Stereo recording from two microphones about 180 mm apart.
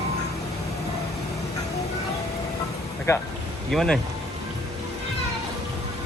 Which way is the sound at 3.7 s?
5° left (ahead or behind).